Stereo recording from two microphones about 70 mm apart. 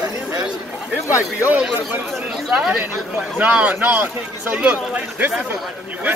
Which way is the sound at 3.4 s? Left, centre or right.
Right.